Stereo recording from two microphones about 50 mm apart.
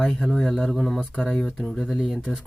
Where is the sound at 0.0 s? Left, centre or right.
Centre.